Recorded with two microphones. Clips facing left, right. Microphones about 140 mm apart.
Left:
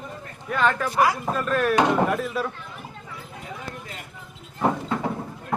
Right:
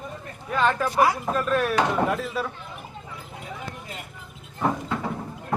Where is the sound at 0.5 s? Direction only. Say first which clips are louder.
Even; centre (ahead or behind).